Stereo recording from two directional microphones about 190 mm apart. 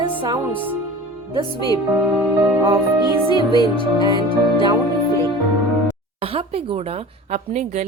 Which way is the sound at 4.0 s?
25° right (ahead or behind).